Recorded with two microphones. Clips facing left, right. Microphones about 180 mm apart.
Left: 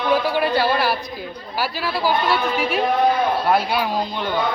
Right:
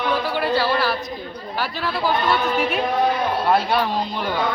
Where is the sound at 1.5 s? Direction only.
5° left (ahead or behind).